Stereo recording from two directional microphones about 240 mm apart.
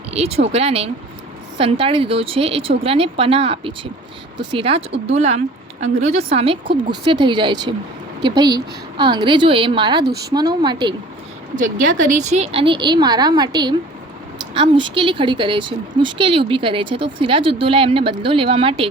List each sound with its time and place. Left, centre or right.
0.1 s a woman's voice: right
10.0 s speech: right
10.3 s a woman's voice: centre
11.5 s a woman's voice: right